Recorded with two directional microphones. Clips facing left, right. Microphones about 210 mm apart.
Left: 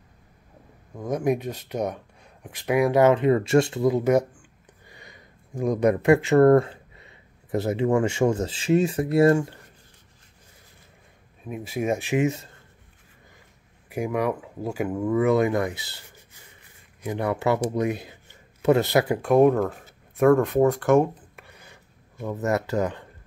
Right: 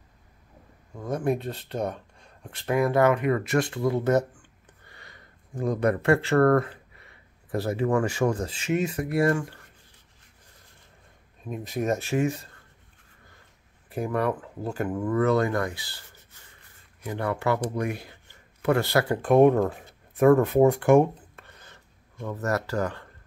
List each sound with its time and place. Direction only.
0.9 s speech: 15° left (ahead or behind)
11.4 s speech: 5° left (ahead or behind)
13.8 s speech: 10° left (ahead or behind)
19.2 s speech: centre (ahead or behind)
19.7 s a sound: centre (ahead or behind)
20.6 s speech: 10° right (ahead or behind)
21.4 s a sound: 10° left (ahead or behind)
22.3 s speech: 20° left (ahead or behind)